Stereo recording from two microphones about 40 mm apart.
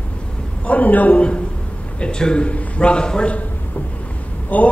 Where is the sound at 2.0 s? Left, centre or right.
Left.